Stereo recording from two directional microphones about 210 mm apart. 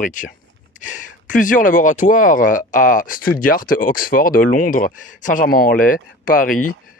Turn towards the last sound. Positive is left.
turn(degrees=40)  # may be behind; listen again after turning